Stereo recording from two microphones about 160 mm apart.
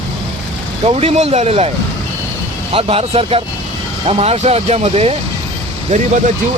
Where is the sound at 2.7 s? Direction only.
35° right (ahead or behind).